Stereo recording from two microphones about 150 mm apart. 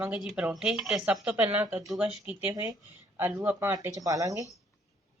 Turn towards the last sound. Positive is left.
turn(degrees=-20)  # may be behind; listen again after turning